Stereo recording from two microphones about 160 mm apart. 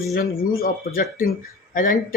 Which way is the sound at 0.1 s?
70° left (ahead or behind).